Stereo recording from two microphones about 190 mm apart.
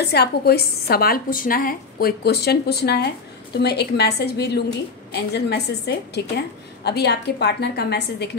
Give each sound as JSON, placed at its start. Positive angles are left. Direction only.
{"t": 0.0, "sound": "a woman's voice", "side_deg": 60}